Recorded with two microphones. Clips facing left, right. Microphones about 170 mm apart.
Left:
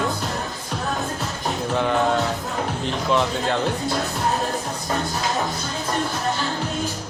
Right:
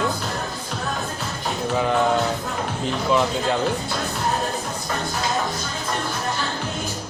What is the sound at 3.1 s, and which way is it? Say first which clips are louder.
Speech: right 1 dB; centre (ahead or behind).